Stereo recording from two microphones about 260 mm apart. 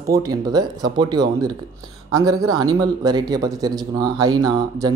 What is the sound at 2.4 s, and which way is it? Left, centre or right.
Speech, right.